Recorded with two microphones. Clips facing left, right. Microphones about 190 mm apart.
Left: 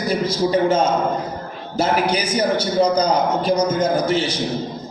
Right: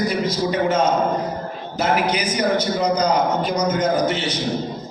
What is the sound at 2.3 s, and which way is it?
A man's voice, 30° left (ahead or behind).